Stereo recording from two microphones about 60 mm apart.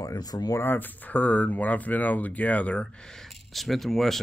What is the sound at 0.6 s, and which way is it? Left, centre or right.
Speech, left.